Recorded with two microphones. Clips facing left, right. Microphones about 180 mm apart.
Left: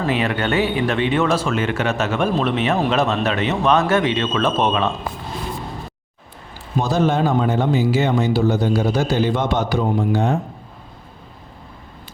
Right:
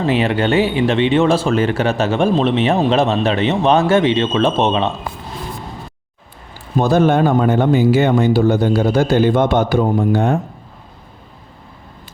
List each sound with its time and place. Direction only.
0.0 s speech: 30° right (ahead or behind)
6.7 s speech: 55° right (ahead or behind)